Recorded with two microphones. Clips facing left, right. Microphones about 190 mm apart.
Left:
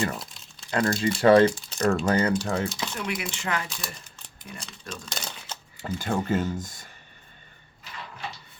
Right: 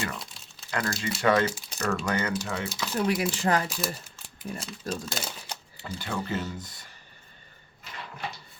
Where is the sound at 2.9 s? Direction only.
35° right (ahead or behind).